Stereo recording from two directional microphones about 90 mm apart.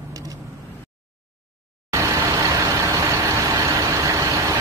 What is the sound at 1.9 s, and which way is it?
Vehicle, 35° right (ahead or behind).